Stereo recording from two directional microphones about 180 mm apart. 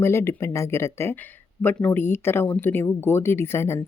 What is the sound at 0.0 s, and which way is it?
Speech, 15° left (ahead or behind).